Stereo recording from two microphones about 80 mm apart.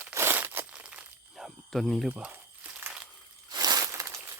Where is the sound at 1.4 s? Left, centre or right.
Centre.